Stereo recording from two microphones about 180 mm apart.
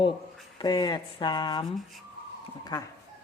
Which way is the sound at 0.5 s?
25° left (ahead or behind).